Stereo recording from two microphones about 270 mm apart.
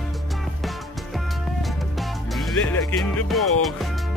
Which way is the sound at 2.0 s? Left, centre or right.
Centre.